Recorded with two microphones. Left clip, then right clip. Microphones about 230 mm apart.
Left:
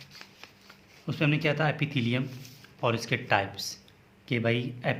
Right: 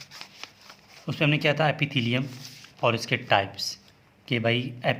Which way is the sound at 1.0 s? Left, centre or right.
Right.